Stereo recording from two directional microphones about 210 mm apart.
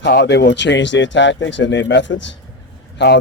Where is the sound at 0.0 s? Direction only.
50° left (ahead or behind).